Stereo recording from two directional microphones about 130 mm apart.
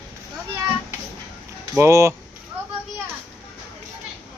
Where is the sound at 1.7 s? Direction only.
20° right (ahead or behind).